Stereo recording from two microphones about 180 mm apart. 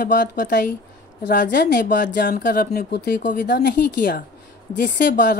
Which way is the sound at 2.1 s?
65° left (ahead or behind).